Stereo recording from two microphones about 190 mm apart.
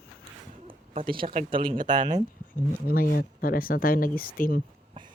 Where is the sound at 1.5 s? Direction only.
25° right (ahead or behind).